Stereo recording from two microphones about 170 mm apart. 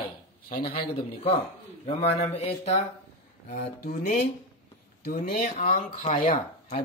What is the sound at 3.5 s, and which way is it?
Speech, 50° left (ahead or behind).